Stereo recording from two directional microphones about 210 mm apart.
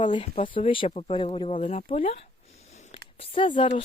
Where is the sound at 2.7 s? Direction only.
30° left (ahead or behind).